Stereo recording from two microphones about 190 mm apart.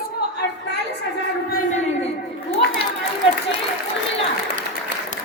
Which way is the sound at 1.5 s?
40° left (ahead or behind).